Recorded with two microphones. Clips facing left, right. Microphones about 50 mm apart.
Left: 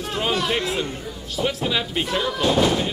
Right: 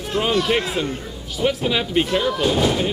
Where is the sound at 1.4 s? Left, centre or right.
Centre.